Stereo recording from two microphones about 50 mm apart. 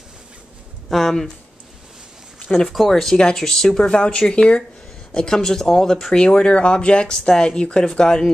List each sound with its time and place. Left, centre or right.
0.8 s speech: centre
2.7 s speech: centre
3.9 s speech: left
6.1 s speech: centre